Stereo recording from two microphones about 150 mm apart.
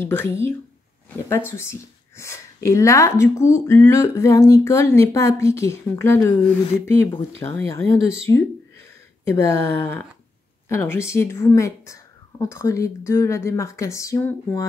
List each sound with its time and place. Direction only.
0.0 s speech: 15° left (ahead or behind)
1.6 s speech: 20° left (ahead or behind)
7.4 s speech: 15° left (ahead or behind)